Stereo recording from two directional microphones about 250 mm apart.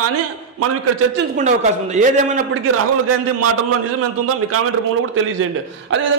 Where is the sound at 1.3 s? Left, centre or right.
Right.